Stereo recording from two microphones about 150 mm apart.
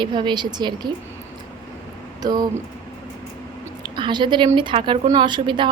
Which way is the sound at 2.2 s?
30° right (ahead or behind).